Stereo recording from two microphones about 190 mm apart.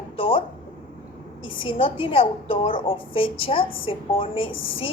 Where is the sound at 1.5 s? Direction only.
25° left (ahead or behind).